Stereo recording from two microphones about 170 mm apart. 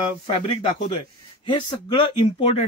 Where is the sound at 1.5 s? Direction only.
25° left (ahead or behind).